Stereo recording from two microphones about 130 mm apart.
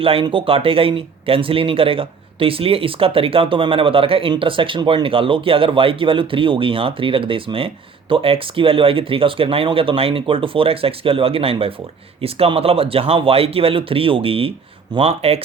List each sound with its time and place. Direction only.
0.0 s speech: 45° right (ahead or behind)